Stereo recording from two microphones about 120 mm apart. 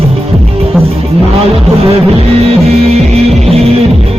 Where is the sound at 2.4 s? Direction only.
55° right (ahead or behind).